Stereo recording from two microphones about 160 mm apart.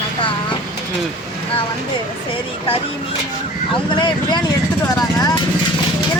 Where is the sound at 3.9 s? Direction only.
30° left (ahead or behind).